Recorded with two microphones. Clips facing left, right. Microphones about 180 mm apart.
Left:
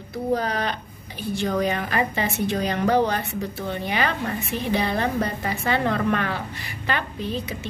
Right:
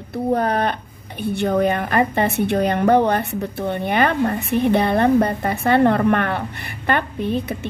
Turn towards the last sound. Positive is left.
turn(degrees=-55)  # may be behind; listen again after turning